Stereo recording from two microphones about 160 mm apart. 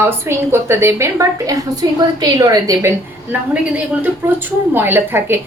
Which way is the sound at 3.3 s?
10° right (ahead or behind).